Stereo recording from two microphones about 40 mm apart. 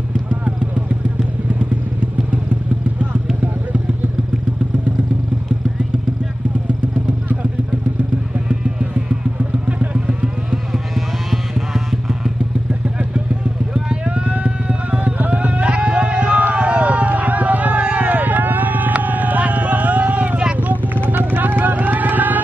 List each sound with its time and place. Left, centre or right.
9.1 s vehicle: right
9.9 s vehicle: right
11.5 s music: centre
13.7 s clip-clop: right
15.0 s music: right
16.5 s a sound: right
20.6 s vehicle: right
21.0 s vehicle: right